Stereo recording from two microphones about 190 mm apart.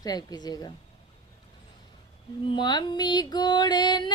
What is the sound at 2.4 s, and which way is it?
A woman's voice, 25° left (ahead or behind).